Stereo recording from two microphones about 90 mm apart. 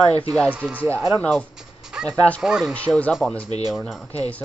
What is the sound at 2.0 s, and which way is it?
Speech, 15° left (ahead or behind).